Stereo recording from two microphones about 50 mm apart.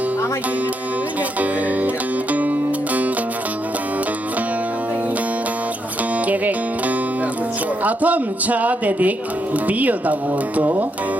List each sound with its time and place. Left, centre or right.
6.2 s music: right
7.9 s a man's voice: right